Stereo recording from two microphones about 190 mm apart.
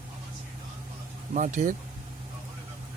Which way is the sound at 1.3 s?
40° right (ahead or behind).